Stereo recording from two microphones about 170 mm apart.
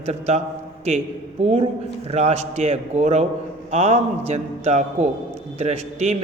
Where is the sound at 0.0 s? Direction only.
40° right (ahead or behind).